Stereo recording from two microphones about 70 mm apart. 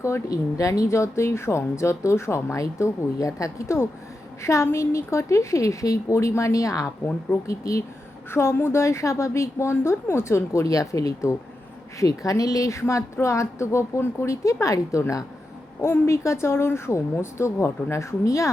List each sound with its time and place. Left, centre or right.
0.0 s speech: left
8.3 s speech: left
15.8 s speech: left